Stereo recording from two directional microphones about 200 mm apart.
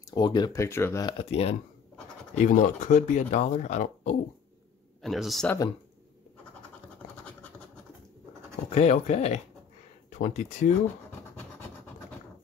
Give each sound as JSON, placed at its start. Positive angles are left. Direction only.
{"t": 0.1, "sound": "speech", "side_deg": 20}
{"t": 1.1, "sound": "speech", "side_deg": 30}
{"t": 5.0, "sound": "speech", "side_deg": 0}
{"t": 8.6, "sound": "speech", "side_deg": 35}